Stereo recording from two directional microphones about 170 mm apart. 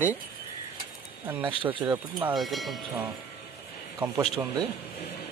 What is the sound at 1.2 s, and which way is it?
Speech, 30° right (ahead or behind).